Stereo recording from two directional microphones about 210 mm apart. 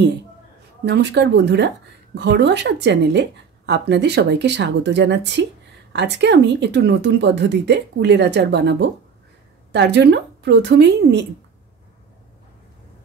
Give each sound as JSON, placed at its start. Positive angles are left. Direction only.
{"t": 0.8, "sound": "a woman's voice", "side_deg": -55}